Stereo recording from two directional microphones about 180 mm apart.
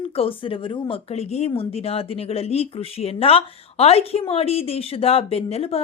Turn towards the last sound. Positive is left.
turn(degrees=35)  # may be behind; listen again after turning